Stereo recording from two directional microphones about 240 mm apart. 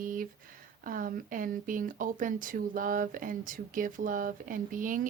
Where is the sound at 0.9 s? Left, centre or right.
Right.